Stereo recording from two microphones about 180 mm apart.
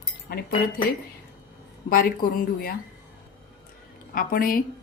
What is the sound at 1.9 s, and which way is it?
Speech, 50° left (ahead or behind).